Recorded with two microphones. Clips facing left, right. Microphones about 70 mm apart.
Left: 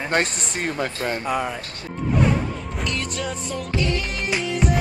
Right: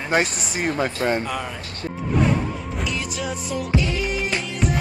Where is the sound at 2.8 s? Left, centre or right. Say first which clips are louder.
Left 1 dB; centre.